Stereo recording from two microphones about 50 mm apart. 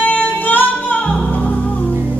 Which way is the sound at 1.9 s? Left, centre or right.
Right.